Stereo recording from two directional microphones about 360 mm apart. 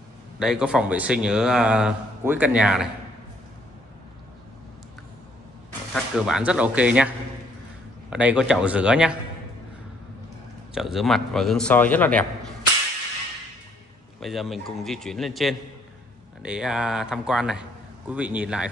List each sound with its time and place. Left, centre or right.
0.4 s speech: centre
5.7 s speech: centre
10.7 s speech: centre
14.2 s speech: centre